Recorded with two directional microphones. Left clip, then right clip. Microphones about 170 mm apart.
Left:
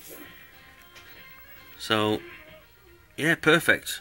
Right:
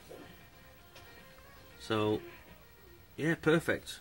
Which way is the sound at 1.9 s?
20° left (ahead or behind).